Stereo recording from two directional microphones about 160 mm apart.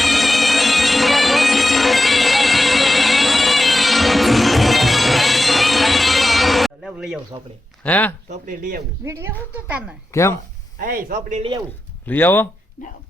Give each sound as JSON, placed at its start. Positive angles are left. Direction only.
{"t": 0.0, "sound": "bagpipes", "side_deg": 0}
{"t": 7.9, "sound": "speech", "side_deg": 10}
{"t": 8.3, "sound": "speech", "side_deg": -55}
{"t": 9.0, "sound": "a woman's voice", "side_deg": -15}
{"t": 10.1, "sound": "speech", "side_deg": 20}
{"t": 10.8, "sound": "speech", "side_deg": -65}
{"t": 12.0, "sound": "speech", "side_deg": 10}